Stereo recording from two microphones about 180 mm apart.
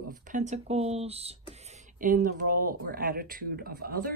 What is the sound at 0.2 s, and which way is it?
Speech, 45° right (ahead or behind).